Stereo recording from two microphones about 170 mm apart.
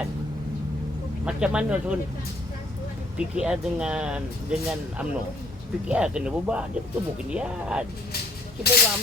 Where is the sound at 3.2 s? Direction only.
5° right (ahead or behind).